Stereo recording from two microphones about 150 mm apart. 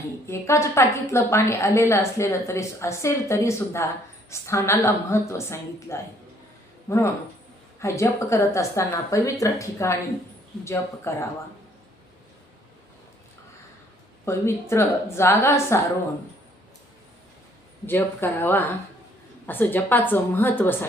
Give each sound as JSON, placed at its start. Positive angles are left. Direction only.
{"t": 0.3, "sound": "a woman's voice", "side_deg": 20}
{"t": 14.3, "sound": "a woman's voice", "side_deg": 20}
{"t": 17.8, "sound": "a woman's voice", "side_deg": 15}